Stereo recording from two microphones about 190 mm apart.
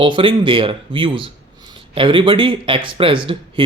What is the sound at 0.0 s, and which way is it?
Speech, 25° right (ahead or behind).